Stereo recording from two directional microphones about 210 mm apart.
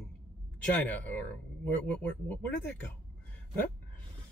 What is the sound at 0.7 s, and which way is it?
Speech, 10° left (ahead or behind).